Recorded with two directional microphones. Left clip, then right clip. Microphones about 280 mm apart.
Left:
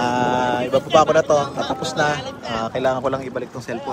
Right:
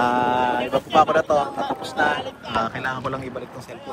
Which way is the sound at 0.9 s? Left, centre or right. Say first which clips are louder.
Left 2 dB; centre.